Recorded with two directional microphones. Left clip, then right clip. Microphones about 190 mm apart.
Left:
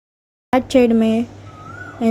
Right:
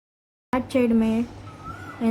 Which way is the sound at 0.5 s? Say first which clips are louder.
Left 8 dB; 25° left (ahead or behind).